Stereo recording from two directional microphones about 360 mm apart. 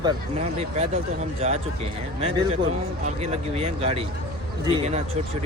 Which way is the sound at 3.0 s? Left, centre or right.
Centre.